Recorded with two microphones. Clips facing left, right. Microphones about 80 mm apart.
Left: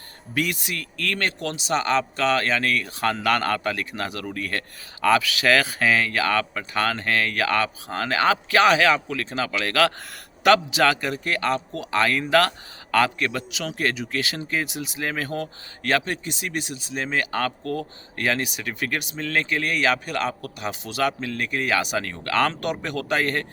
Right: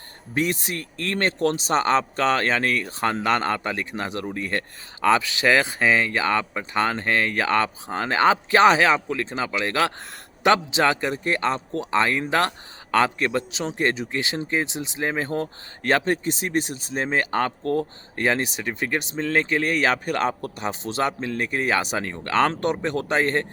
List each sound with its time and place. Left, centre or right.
0.3 s a man's voice: right